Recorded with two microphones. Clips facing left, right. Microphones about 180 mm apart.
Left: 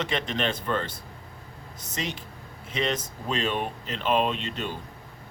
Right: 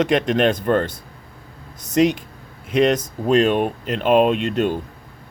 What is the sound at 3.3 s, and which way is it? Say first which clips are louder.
Speech: right 12 dB; 55° right (ahead or behind).